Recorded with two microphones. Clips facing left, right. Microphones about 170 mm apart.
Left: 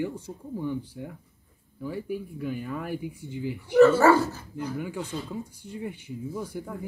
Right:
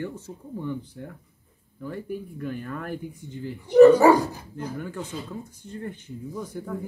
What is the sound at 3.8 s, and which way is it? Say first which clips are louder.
Speech: right 4 dB; 15° right (ahead or behind).